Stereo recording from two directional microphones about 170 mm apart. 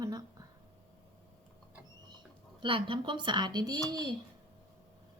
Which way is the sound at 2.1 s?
25° right (ahead or behind).